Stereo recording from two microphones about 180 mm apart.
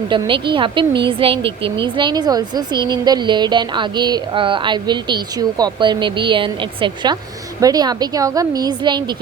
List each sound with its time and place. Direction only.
0.1 s speech: 25° right (ahead or behind)